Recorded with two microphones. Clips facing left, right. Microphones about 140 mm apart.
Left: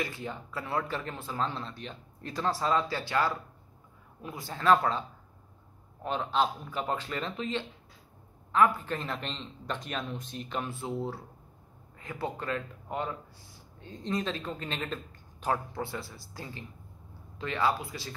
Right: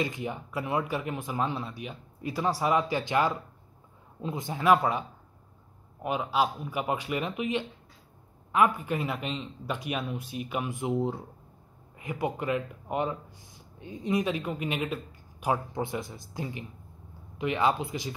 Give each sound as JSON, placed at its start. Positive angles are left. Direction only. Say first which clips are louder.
{"t": 0.0, "sound": "speech", "louder": "right 4 dB", "side_deg": -15}
{"t": 6.0, "sound": "speech", "louder": "right 1 dB", "side_deg": -10}